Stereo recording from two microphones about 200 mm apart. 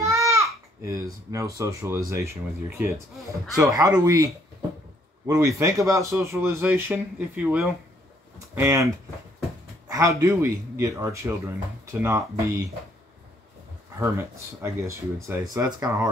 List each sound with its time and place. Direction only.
0.0 s babbling: 15° right (ahead or behind)
1.3 s speech: 15° right (ahead or behind)
3.5 s speech: 15° right (ahead or behind)
13.9 s speech: 15° right (ahead or behind)